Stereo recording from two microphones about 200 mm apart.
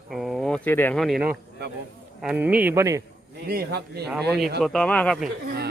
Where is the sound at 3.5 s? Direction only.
50° right (ahead or behind).